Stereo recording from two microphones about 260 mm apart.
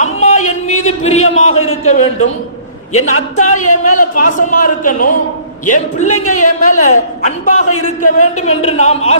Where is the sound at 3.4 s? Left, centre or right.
Left.